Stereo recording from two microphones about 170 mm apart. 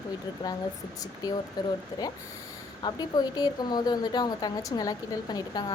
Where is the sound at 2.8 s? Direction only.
25° left (ahead or behind).